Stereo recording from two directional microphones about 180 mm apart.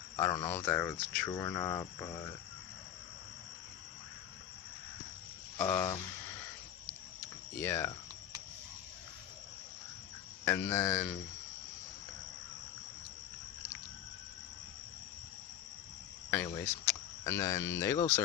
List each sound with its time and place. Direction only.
0.2 s speech: 20° left (ahead or behind)
5.5 s speech: 20° left (ahead or behind)
7.6 s speech: 15° left (ahead or behind)
10.8 s speech: 15° left (ahead or behind)
16.3 s speech: 10° left (ahead or behind)